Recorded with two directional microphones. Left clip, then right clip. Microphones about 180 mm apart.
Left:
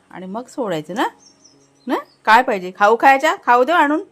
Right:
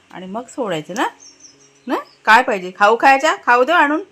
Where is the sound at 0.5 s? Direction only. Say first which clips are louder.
Even; 20° left (ahead or behind).